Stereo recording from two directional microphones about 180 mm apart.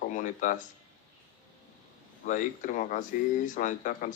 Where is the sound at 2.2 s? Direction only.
45° left (ahead or behind).